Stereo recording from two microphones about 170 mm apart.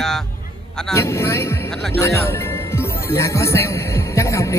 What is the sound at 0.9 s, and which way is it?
Speech, 15° left (ahead or behind).